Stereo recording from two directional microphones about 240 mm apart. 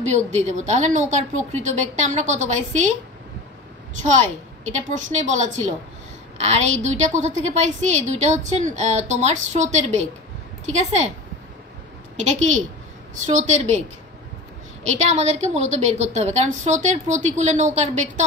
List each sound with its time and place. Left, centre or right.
0.0 s a woman's voice: right
4.0 s a woman's voice: right
12.2 s a woman's voice: right
14.9 s a woman's voice: right